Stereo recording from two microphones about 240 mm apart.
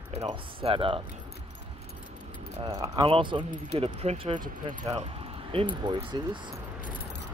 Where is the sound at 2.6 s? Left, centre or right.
Centre.